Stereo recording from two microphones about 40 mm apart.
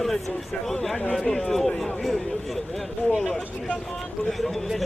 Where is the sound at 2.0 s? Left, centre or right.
Centre.